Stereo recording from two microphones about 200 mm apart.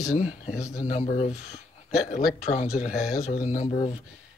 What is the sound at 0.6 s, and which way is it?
Speech, 15° left (ahead or behind).